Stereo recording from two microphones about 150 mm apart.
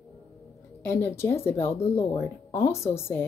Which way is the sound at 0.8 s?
15° left (ahead or behind).